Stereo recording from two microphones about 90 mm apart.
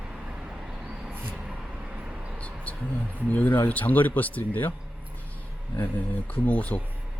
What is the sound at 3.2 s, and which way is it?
Speech, 20° left (ahead or behind).